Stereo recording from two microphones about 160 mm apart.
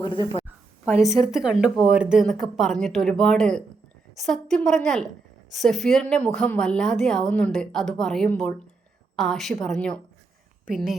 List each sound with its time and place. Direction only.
0.0 s speech: 30° left (ahead or behind)
1.0 s a woman's voice: centre (ahead or behind)